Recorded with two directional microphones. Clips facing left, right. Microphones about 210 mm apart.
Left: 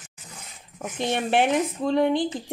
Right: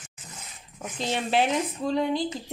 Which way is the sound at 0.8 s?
60° left (ahead or behind).